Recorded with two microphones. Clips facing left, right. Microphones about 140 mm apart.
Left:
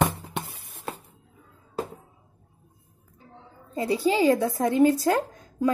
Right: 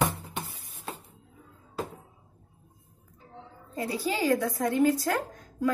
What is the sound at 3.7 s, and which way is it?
A woman's voice, 25° left (ahead or behind).